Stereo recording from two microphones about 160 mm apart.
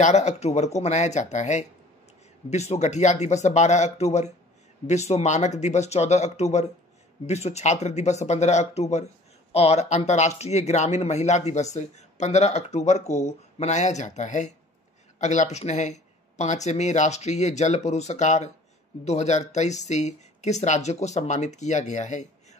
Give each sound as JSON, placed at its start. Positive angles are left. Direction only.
{"t": 0.0, "sound": "speech", "side_deg": 45}